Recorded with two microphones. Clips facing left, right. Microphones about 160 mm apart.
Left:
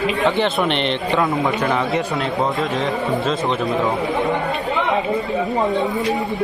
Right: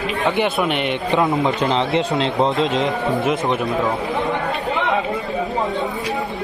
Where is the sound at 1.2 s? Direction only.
20° right (ahead or behind).